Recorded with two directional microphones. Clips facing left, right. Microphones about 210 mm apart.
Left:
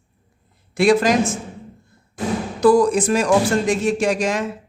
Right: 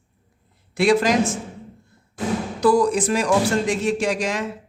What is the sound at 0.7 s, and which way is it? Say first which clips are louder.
Speech: left 2 dB; 50° left (ahead or behind).